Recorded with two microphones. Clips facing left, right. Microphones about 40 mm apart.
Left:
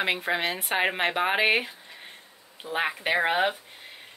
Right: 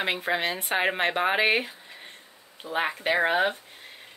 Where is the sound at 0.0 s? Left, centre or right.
Centre.